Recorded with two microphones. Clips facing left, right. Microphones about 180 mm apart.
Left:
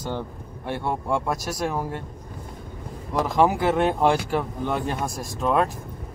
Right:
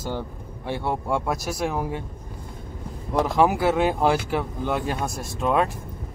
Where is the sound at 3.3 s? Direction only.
5° right (ahead or behind).